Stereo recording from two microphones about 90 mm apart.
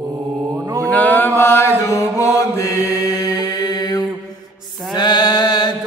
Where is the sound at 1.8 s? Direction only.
30° left (ahead or behind); by 4.0 s 45° left (ahead or behind).